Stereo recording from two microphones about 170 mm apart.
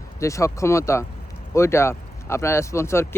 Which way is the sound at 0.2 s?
15° left (ahead or behind).